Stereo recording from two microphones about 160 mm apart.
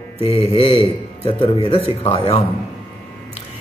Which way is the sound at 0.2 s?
35° left (ahead or behind).